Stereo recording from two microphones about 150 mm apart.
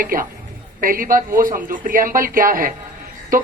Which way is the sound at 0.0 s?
70° right (ahead or behind).